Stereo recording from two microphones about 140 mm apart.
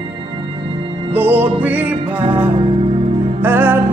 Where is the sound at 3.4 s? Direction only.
15° right (ahead or behind).